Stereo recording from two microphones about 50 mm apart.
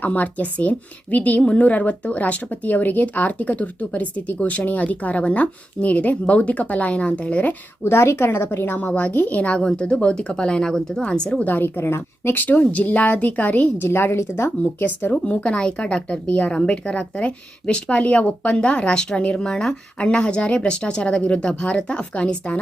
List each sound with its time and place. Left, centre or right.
0.0 s a woman's voice: left
7.9 s speech: left
8.9 s a woman's voice: left
9.6 s speech: centre
11.4 s speech: left
11.8 s a woman's voice: left
12.4 s speech: left
13.7 s a woman's voice: left
15.1 s a woman's voice: left